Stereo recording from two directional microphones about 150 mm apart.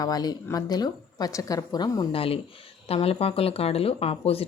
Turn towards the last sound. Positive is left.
turn(degrees=40)  # may be behind; listen again after turning